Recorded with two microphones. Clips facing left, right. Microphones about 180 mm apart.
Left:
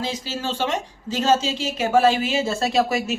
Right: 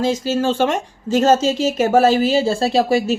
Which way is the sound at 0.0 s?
45° right (ahead or behind).